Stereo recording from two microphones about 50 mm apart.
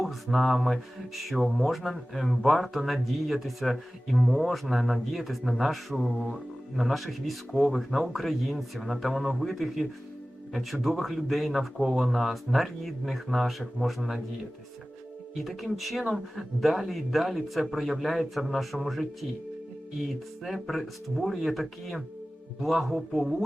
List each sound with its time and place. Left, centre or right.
0.0 s speech: centre
15.4 s speech: centre
20.4 s speech: centre